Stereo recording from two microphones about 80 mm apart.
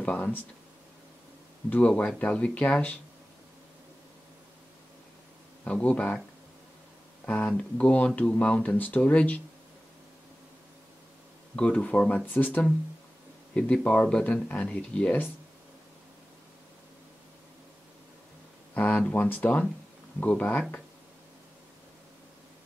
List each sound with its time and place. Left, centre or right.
0.0 s speech: centre
1.7 s speech: centre
5.6 s speech: centre
7.2 s speech: centre
11.5 s speech: centre
18.8 s speech: centre